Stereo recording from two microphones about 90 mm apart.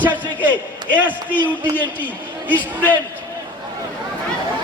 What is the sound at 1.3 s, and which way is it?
Speech, 20° left (ahead or behind).